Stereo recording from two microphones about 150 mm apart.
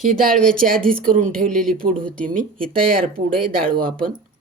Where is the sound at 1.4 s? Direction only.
5° left (ahead or behind).